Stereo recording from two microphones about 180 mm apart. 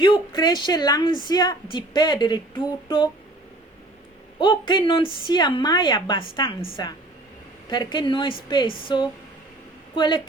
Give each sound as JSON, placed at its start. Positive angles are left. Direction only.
{"t": 0.0, "sound": "a woman's voice", "side_deg": 25}
{"t": 4.4, "sound": "a woman's voice", "side_deg": 25}